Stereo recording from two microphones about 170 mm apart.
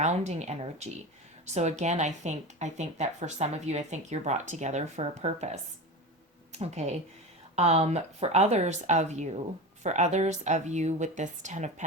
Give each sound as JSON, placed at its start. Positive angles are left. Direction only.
{"t": 0.0, "sound": "a woman's voice", "side_deg": -40}